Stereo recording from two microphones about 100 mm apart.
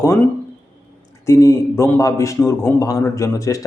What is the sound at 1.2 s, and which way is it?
A man's voice, 30° left (ahead or behind).